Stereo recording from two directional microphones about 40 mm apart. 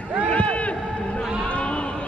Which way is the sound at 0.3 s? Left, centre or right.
Left.